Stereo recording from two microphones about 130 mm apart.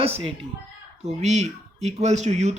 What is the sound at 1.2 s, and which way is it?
Speech, 60° right (ahead or behind).